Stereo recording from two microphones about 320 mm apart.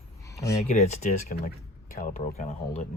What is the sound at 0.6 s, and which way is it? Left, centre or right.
Speech, left.